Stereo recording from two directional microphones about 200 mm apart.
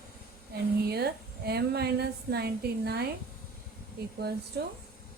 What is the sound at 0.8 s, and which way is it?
A woman's voice, 50° right (ahead or behind).